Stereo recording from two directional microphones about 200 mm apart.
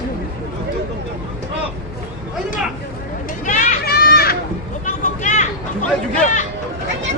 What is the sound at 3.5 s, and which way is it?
Children playing, 45° left (ahead or behind).